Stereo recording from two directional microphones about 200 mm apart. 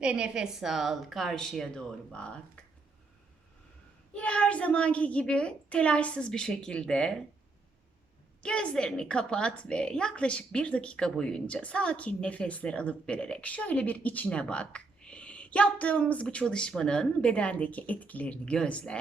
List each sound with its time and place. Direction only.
0.0 s a woman's voice: 5° right (ahead or behind)
4.1 s a woman's voice: 5° left (ahead or behind)
8.4 s a woman's voice: 5° left (ahead or behind)